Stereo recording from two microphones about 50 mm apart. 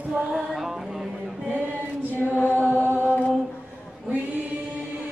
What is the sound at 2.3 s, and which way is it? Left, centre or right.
Chant, left.